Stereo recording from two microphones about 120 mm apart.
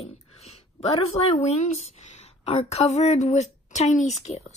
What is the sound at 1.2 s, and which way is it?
A woman's voice, 60° left (ahead or behind).